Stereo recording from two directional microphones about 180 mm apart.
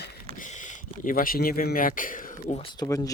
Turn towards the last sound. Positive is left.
turn(degrees=20)  # may be behind; listen again after turning